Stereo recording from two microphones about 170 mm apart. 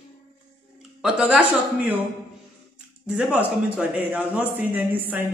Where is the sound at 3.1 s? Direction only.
5° right (ahead or behind).